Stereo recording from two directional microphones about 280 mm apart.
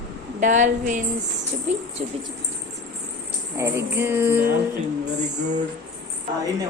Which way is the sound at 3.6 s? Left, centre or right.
Centre.